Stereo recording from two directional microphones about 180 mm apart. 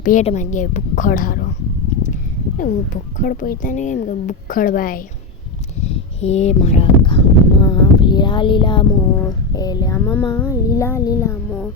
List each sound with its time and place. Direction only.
0.0 s a woman's voice: 45° left (ahead or behind)
2.6 s speech: 45° left (ahead or behind)
5.8 s speech: 35° left (ahead or behind)
7.6 s a sound: 25° left (ahead or behind)
8.9 s a sound: 15° left (ahead or behind)
10.0 s music: 15° left (ahead or behind)